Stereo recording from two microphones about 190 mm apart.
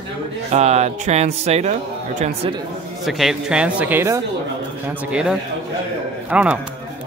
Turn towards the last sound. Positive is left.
turn(degrees=-5)  # may be behind; listen again after turning